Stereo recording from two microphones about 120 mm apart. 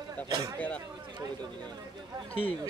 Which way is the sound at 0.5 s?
10° left (ahead or behind).